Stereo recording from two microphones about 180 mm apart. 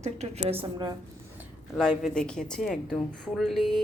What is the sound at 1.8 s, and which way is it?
A woman's voice, centre (ahead or behind).